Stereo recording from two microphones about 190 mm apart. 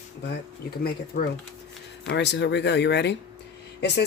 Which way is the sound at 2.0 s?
65° left (ahead or behind).